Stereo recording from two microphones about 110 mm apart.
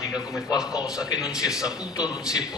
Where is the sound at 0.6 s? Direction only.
5° right (ahead or behind).